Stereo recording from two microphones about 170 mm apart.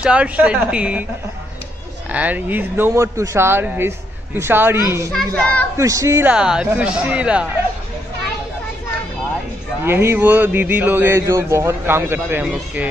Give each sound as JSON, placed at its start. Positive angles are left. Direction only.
{"t": 0.0, "sound": "a man's voice", "side_deg": -5}
{"t": 2.0, "sound": "a man's voice", "side_deg": -10}
{"t": 5.1, "sound": "a child's voice", "side_deg": 10}
{"t": 5.8, "sound": "a man's voice", "side_deg": -20}
{"t": 6.3, "sound": "speech", "side_deg": -5}
{"t": 9.8, "sound": "a man's voice", "side_deg": -15}